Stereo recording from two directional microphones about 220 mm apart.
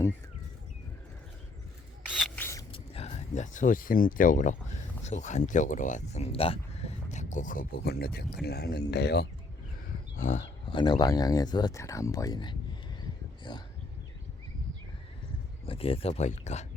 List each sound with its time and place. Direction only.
2.0 s a sound: 5° left (ahead or behind)
2.7 s speech: 25° left (ahead or behind); by 9.3 s 50° left (ahead or behind)
10.2 s speech: 35° left (ahead or behind)
10.7 s speech: 20° left (ahead or behind)
15.6 s speech: 25° left (ahead or behind)